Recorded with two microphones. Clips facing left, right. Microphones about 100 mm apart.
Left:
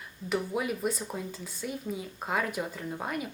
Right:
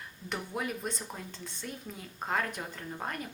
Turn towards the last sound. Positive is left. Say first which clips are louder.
# left 4 dB
turn(degrees=5)  # may be behind; listen again after turning